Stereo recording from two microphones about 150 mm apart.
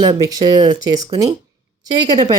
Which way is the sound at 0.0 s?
30° right (ahead or behind).